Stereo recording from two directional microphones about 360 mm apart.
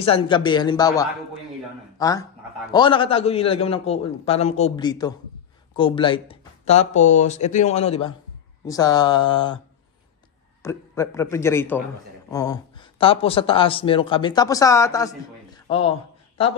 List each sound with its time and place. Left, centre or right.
0.0 s a man's voice: centre
10.6 s a man's voice: centre